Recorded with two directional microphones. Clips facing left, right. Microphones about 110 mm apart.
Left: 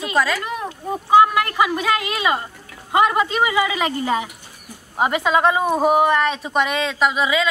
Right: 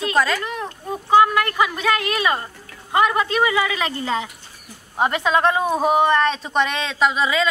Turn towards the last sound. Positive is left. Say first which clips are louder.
# even
turn(degrees=5)  # may be behind; listen again after turning